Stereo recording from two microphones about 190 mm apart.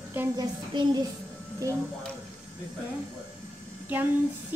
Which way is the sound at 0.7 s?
25° right (ahead or behind).